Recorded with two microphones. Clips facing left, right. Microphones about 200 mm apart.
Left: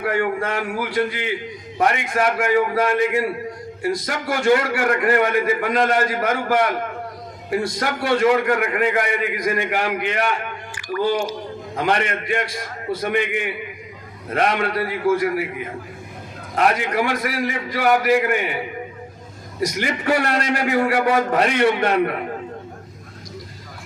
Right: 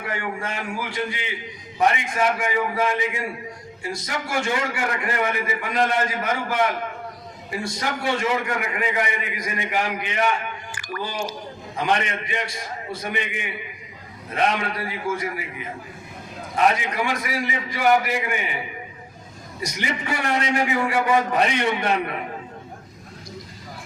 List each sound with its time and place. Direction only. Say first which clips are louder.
0.0 s a man's voice: left 8 dB; 60° left (ahead or behind)
11.8 s a man's voice: left 2 dB; 60° left (ahead or behind)
19.8 s a man's voice: left 5 dB; 65° left (ahead or behind)